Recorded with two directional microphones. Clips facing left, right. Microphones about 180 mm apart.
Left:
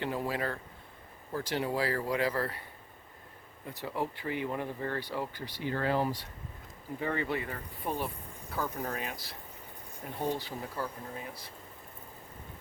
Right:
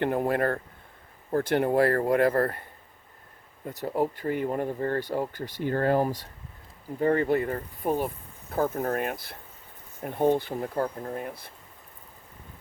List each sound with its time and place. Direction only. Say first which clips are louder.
0.0 s speech: right 8 dB; 55° right (ahead or behind)
3.7 s speech: right 8 dB; 45° right (ahead or behind)